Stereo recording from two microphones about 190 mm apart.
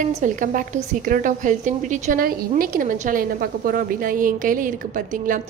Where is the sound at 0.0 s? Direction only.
45° right (ahead or behind).